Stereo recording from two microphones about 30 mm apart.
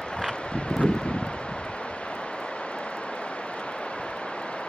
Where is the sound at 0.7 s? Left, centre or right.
Left.